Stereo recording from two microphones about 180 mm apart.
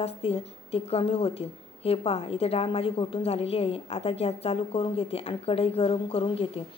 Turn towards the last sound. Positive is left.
turn(degrees=35)  # may be behind; listen again after turning